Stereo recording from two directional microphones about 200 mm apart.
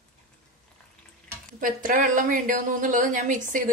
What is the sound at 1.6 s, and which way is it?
Speech, 40° right (ahead or behind).